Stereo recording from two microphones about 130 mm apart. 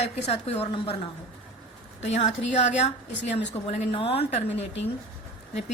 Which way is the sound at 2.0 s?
60° left (ahead or behind).